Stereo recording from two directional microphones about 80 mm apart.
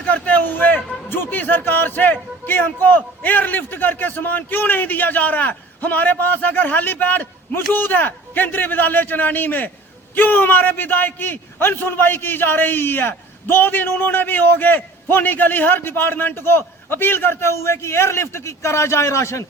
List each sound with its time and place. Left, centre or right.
0.0 s a man's voice: centre; by 19.5 s left